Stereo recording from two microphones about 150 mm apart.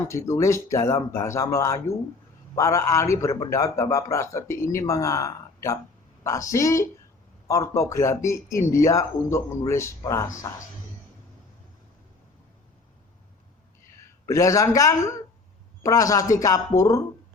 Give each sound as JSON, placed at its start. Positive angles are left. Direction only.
{"t": 0.1, "sound": "speech", "side_deg": 20}
{"t": 14.3, "sound": "speech", "side_deg": 20}